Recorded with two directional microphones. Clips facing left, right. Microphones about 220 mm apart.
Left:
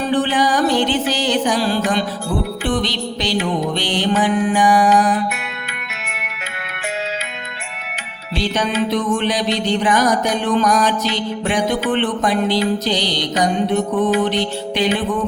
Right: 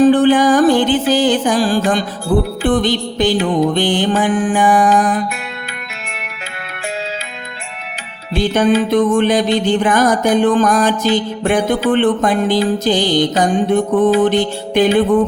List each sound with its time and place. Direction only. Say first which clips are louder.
0.1 s music: right 7 dB; 50° right (ahead or behind)
8.4 s music: right 6 dB; 50° right (ahead or behind)